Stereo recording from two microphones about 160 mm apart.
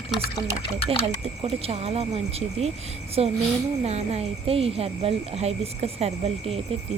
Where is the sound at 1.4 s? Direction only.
40° right (ahead or behind).